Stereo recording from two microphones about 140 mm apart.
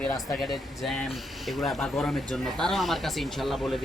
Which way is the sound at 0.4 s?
Centre (ahead or behind).